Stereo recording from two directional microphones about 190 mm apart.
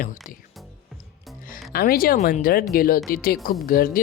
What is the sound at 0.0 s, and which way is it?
Speech, 45° left (ahead or behind).